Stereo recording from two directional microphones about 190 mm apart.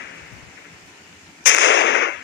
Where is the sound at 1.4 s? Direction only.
75° left (ahead or behind).